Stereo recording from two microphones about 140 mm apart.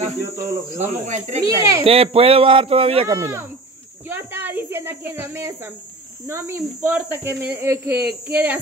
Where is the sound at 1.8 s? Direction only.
45° right (ahead or behind).